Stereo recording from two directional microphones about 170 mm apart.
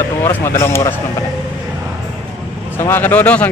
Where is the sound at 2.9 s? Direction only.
10° left (ahead or behind).